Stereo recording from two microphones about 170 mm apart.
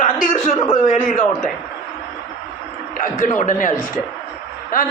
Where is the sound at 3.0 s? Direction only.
55° left (ahead or behind).